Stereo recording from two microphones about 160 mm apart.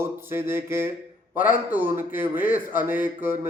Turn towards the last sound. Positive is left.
turn(degrees=-15)  # may be behind; listen again after turning